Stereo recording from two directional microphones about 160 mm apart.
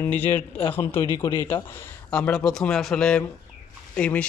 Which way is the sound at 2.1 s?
5° left (ahead or behind).